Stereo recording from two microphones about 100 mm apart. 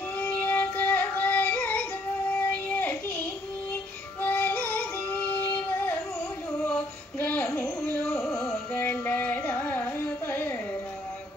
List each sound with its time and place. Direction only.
0.4 s music: 20° left (ahead or behind)
4.2 s music: 20° left (ahead or behind)
7.2 s music: 20° left (ahead or behind)
8.7 s carnatic music: 20° left (ahead or behind)